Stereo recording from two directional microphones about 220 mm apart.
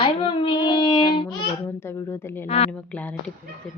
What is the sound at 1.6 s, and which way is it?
A woman's voice, 10° left (ahead or behind).